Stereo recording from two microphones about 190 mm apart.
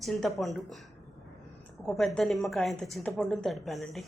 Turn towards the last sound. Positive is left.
turn(degrees=0)  # may be behind; listen again after turning